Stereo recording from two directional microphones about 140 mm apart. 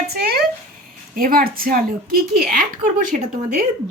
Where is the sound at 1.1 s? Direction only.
90° right.